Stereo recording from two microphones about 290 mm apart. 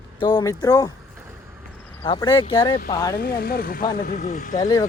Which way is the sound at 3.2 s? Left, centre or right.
Left.